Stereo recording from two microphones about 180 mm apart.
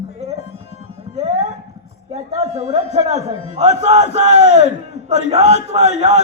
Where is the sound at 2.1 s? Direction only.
35° right (ahead or behind).